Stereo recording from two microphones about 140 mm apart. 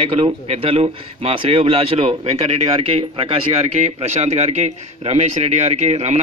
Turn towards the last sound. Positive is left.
turn(degrees=-55)  # may be behind; listen again after turning